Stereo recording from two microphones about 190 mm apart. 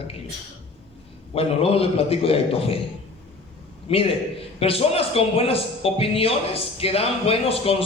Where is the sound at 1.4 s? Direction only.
30° left (ahead or behind).